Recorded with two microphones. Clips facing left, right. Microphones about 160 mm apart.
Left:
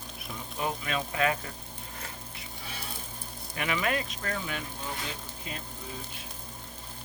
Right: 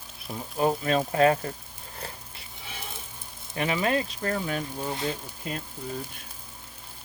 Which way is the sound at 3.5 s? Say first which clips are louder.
Right 4 dB; 30° right (ahead or behind).